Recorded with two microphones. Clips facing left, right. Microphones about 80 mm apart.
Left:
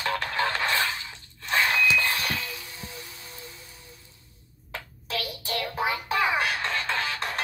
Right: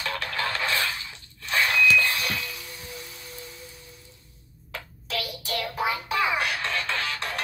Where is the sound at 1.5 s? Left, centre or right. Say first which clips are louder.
Right 1 dB; left.